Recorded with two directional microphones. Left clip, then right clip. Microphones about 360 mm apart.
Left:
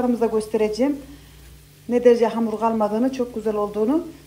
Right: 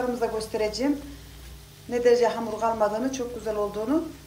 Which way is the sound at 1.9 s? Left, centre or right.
Centre.